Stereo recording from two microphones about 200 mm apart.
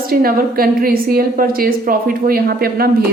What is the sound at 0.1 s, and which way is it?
A woman's voice, 50° right (ahead or behind).